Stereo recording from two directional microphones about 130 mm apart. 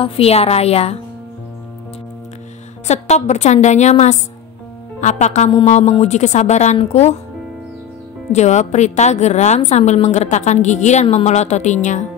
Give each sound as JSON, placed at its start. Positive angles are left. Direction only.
{"t": 0.0, "sound": "a woman's voice", "side_deg": 50}
{"t": 2.9, "sound": "a woman's voice", "side_deg": 60}
{"t": 8.3, "sound": "a woman's voice", "side_deg": 60}